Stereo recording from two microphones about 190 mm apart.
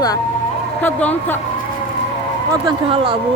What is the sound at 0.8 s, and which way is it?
Speech, 10° left (ahead or behind).